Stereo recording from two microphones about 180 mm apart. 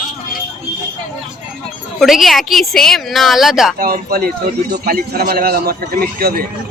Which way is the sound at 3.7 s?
55° right (ahead or behind).